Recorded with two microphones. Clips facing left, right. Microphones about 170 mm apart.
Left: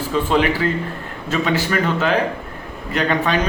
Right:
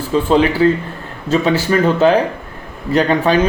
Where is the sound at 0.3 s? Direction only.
30° right (ahead or behind).